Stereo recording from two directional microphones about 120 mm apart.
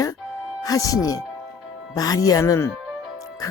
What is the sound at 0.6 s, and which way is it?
Speech, 30° left (ahead or behind).